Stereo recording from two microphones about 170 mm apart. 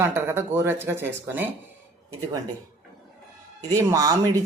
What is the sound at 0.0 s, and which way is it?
Speech, 15° right (ahead or behind).